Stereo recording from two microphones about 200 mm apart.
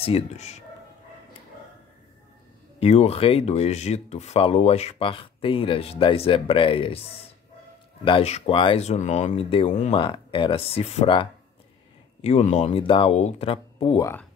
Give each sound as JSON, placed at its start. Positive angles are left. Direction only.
{"t": 0.0, "sound": "speech", "side_deg": 30}
{"t": 2.8, "sound": "speech", "side_deg": 30}
{"t": 8.0, "sound": "speech", "side_deg": 30}
{"t": 9.9, "sound": "speech", "side_deg": 25}